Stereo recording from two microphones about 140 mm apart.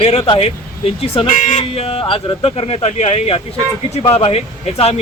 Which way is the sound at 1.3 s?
65° left (ahead or behind).